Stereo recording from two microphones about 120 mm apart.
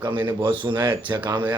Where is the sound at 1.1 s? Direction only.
40° right (ahead or behind).